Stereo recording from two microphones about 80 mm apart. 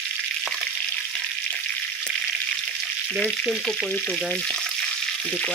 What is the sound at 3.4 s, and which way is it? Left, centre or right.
Frying, centre.